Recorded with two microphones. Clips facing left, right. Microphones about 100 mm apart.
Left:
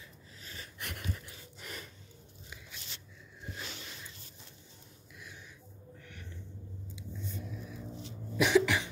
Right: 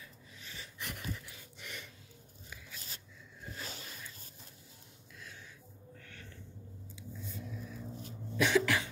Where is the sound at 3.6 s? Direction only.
40° right (ahead or behind).